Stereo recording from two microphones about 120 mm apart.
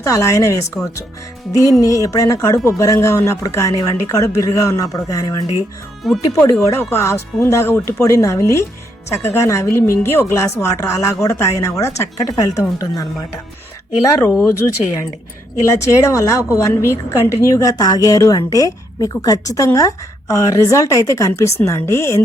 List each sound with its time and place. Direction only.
0.0 s a woman's voice: 25° left (ahead or behind)
1.8 s a woman's voice: 30° left (ahead or behind)
6.0 s speech: centre (ahead or behind)
6.7 s a woman's voice: 20° left (ahead or behind)
15.6 s a woman's voice: 25° left (ahead or behind)